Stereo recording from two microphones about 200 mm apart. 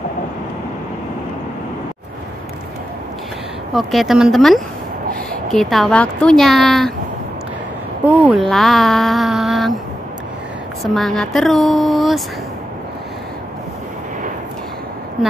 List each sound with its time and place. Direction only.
3.7 s speech: centre (ahead or behind)
8.0 s speech: 5° right (ahead or behind)
11.0 s speech: centre (ahead or behind)